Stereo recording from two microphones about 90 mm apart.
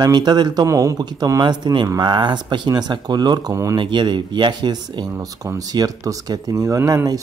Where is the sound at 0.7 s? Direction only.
35° right (ahead or behind).